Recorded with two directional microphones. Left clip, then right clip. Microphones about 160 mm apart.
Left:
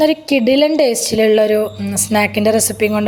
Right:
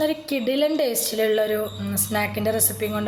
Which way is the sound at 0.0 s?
45° left (ahead or behind).